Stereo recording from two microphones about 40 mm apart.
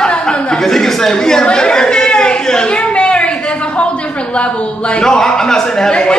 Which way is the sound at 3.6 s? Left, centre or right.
Left.